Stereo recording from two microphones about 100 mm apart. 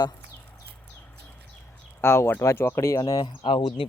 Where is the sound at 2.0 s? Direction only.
25° left (ahead or behind).